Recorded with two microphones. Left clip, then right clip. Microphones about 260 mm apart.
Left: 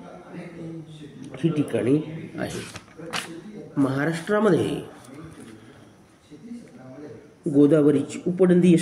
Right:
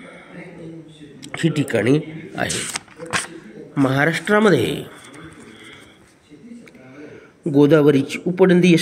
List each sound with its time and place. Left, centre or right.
1.2 s speech: right
7.5 s speech: right